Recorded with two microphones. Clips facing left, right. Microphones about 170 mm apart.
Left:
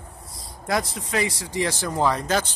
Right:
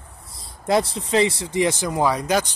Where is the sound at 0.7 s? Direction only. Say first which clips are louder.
Right 5 dB; 25° right (ahead or behind); by 2.4 s 10° right (ahead or behind).